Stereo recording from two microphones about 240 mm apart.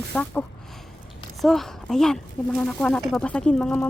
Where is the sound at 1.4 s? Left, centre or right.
Centre.